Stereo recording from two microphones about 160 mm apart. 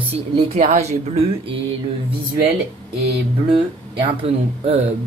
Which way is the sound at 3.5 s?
35° right (ahead or behind).